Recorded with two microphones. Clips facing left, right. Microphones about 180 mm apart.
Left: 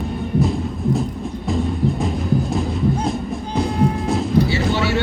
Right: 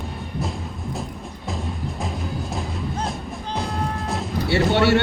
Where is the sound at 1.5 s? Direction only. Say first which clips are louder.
Left 9 dB; centre (ahead or behind).